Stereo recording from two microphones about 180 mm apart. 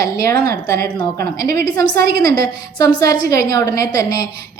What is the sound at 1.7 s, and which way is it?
A woman's voice, 20° left (ahead or behind).